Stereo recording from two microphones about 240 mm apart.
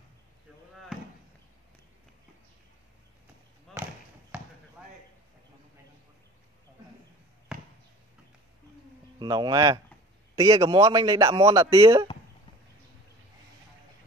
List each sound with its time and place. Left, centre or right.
3.7 s basketball bounce: centre
7.5 s basketball bounce: centre
9.2 s a man's voice: centre